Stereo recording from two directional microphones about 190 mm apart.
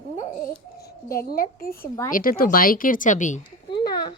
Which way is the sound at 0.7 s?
55° left (ahead or behind).